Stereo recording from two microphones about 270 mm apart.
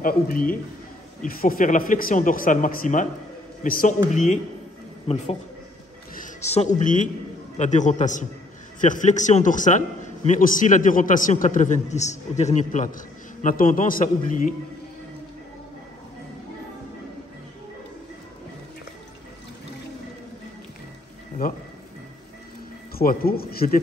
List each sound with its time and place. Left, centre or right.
0.0 s a man's voice: left
22.9 s speech: left